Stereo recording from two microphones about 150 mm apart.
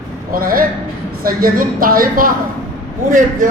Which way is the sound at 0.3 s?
75° right (ahead or behind).